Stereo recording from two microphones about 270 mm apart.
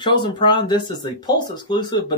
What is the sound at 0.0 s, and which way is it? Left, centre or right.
Speech, centre.